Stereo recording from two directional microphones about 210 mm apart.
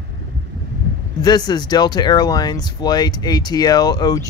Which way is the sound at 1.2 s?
20° left (ahead or behind).